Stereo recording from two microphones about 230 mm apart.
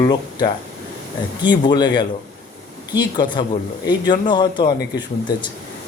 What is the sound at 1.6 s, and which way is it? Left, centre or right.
Speech, centre.